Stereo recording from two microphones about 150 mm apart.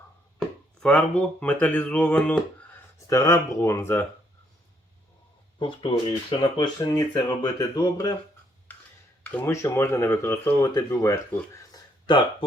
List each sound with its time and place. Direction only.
0.8 s speech: 5° left (ahead or behind)
3.1 s speech: 20° left (ahead or behind)
5.5 s speech: 35° left (ahead or behind)
6.6 s speech: 25° left (ahead or behind)
9.3 s speech: 15° left (ahead or behind)
11.7 s a sound: 35° left (ahead or behind)